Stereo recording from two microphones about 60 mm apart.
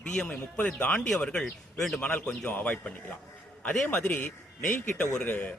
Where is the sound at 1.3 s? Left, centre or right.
Centre.